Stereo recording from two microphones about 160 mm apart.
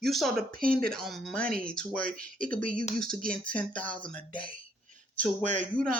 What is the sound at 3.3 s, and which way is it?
Speech, 5° left (ahead or behind).